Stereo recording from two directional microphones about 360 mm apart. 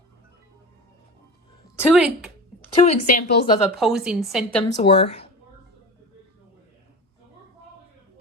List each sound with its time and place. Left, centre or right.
1.8 s speech: centre
2.7 s speech: centre
3.8 s speech: centre
4.8 s speech: centre